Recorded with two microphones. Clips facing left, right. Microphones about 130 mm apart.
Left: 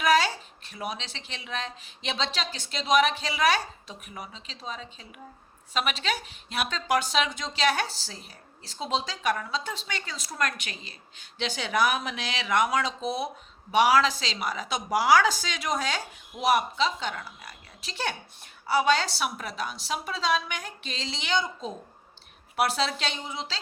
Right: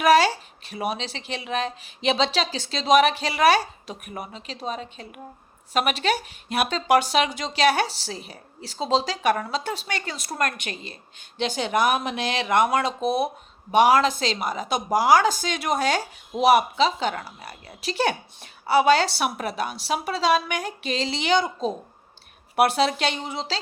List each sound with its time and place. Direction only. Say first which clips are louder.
0.0 s a woman's voice: right 6 dB; 70° right (ahead or behind)
13.7 s a woman's voice: right 4 dB; 50° right (ahead or behind); by 21.7 s 75° right (ahead or behind)
22.5 s a woman's voice: right 6 dB; 60° right (ahead or behind)